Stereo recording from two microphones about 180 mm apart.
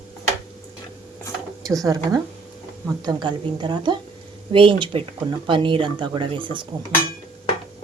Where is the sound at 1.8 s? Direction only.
20° right (ahead or behind).